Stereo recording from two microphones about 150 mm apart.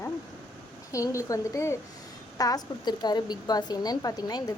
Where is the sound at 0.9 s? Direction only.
20° left (ahead or behind).